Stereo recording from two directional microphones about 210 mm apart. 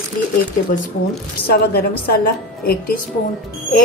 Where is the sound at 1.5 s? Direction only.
50° left (ahead or behind).